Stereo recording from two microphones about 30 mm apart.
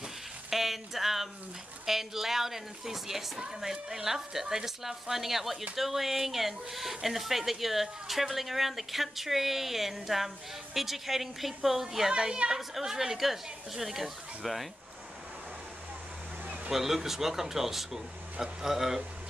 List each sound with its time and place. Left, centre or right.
0.5 s speech: centre
12.1 s a woman's voice: right
12.5 s speech: centre
16.7 s speech: centre